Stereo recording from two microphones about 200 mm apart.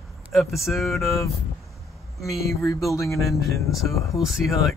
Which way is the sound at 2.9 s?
15° left (ahead or behind).